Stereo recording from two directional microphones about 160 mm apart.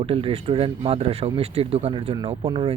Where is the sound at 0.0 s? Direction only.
35° right (ahead or behind).